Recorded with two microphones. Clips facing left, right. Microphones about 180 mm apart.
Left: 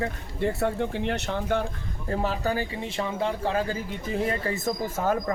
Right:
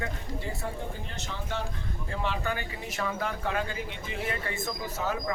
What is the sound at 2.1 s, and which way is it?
Speech, 40° left (ahead or behind).